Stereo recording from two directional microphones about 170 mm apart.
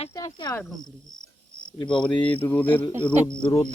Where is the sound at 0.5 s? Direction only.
5° left (ahead or behind).